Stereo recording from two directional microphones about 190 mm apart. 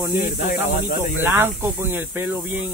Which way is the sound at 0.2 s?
45° left (ahead or behind).